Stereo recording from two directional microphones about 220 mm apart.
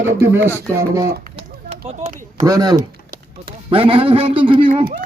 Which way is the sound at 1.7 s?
30° right (ahead or behind).